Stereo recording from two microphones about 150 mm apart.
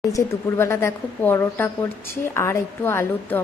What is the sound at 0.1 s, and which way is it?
A woman's voice, 15° left (ahead or behind).